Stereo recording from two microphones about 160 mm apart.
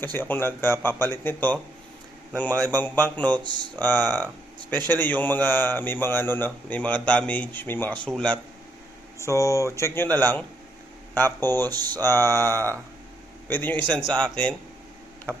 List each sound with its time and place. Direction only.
0.0 s a man's voice: 10° left (ahead or behind)
9.1 s a man's voice: 20° left (ahead or behind)
15.3 s tick-tock: 5° left (ahead or behind)